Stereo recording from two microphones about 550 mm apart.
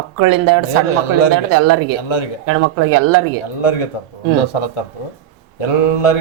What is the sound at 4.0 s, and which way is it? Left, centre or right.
Speech, left.